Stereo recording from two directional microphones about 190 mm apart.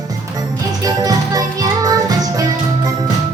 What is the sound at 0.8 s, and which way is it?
Music, 20° right (ahead or behind).